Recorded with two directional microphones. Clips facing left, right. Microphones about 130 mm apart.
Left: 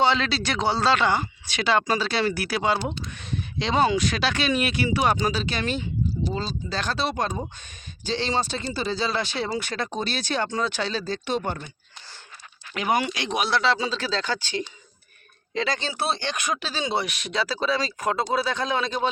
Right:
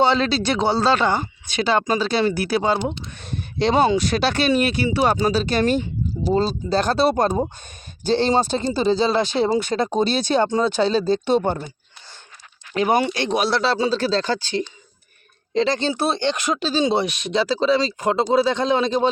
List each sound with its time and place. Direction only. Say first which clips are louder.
0.2 s speech: right 6 dB; 35° right (ahead or behind)
3.2 s speech: right 6 dB; 40° right (ahead or behind)
8.0 s speech: right 8 dB; 50° right (ahead or behind)
8.8 s speech: right 8 dB; 25° right (ahead or behind)
12.7 s speech: right 6 dB; 30° right (ahead or behind)